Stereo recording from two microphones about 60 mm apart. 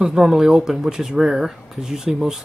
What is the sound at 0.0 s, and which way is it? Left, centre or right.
Speech, centre.